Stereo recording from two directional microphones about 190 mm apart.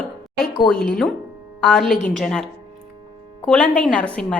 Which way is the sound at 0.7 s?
50° left (ahead or behind).